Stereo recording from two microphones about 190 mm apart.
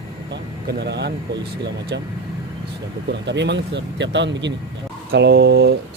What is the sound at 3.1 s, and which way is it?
Speech, 65° right (ahead or behind).